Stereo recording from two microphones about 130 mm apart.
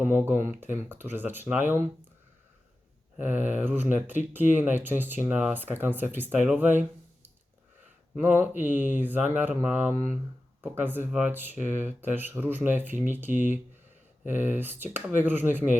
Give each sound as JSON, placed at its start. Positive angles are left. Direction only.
{"t": 0.0, "sound": "speech", "side_deg": -15}
{"t": 3.2, "sound": "speech", "side_deg": -15}
{"t": 8.2, "sound": "speech", "side_deg": -15}